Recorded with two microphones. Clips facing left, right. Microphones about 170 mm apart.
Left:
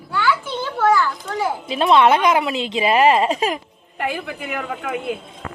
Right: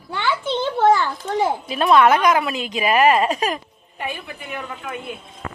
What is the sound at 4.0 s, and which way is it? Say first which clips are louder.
A woman's voice: left 5 dB; 90° left.